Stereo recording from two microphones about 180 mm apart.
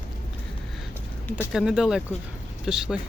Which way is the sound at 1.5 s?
5° right (ahead or behind).